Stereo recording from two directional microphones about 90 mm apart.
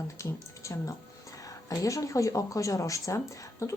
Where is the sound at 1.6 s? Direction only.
40° left (ahead or behind).